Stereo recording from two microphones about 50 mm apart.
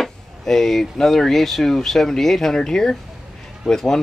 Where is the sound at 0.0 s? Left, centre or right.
Centre.